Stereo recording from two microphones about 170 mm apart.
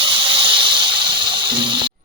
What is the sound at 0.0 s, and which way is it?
Snake, 30° right (ahead or behind).